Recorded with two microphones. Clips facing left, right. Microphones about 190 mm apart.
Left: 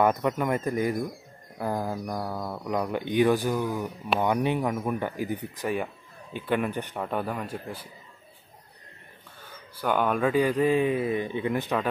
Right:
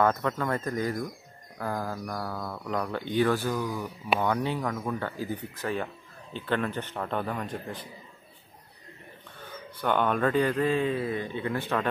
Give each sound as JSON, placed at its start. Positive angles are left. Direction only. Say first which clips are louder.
{"t": 0.0, "sound": "speech", "louder": "left 2 dB", "side_deg": 15}
{"t": 9.8, "sound": "speech", "louder": "left 1 dB", "side_deg": 5}